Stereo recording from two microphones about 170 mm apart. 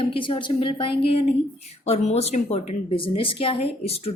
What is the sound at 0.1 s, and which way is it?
A woman's voice, 30° left (ahead or behind).